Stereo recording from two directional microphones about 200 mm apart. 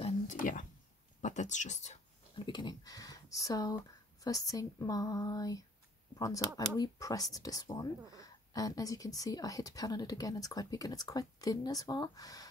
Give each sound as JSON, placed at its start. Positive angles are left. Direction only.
{"t": 0.0, "sound": "whispering", "side_deg": 40}
{"t": 1.2, "sound": "speech", "side_deg": 35}